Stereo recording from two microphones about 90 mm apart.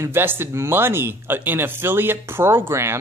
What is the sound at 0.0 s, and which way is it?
Speech, 25° right (ahead or behind).